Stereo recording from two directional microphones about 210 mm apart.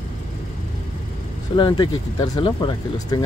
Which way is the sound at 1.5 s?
20° left (ahead or behind).